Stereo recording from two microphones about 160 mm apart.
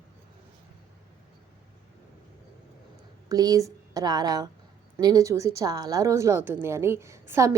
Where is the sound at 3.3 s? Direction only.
25° right (ahead or behind).